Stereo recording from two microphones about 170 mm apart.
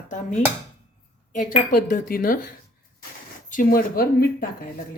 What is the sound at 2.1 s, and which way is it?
Speech, 60° left (ahead or behind).